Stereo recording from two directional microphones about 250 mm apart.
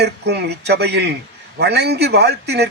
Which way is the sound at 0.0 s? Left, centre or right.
Right.